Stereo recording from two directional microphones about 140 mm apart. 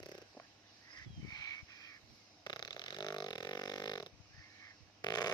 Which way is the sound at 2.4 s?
30° left (ahead or behind).